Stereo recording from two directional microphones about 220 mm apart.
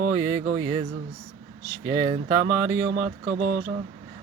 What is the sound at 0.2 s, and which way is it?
Speech, 15° right (ahead or behind).